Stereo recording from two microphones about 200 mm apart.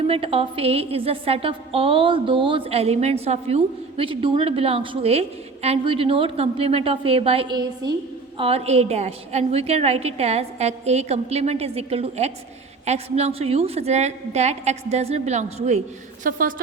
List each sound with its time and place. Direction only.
0.1 s a woman's voice: 30° right (ahead or behind)
16.2 s a woman's voice: 45° right (ahead or behind)